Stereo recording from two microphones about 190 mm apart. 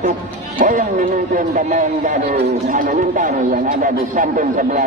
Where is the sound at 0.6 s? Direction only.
45° right (ahead or behind).